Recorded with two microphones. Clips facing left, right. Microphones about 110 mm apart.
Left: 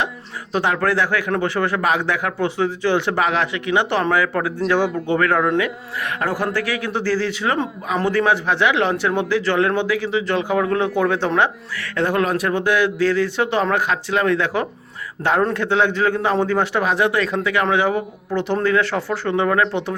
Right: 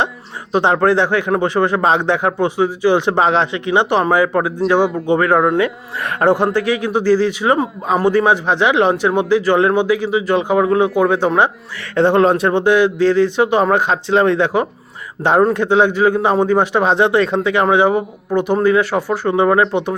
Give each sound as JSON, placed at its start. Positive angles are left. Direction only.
{"t": 0.5, "sound": "speech", "side_deg": -25}
{"t": 5.5, "sound": "speech", "side_deg": -35}
{"t": 6.3, "sound": "speech", "side_deg": -20}
{"t": 19.5, "sound": "speech", "side_deg": -25}